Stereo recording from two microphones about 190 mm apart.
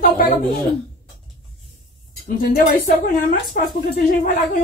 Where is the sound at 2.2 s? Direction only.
50° left (ahead or behind).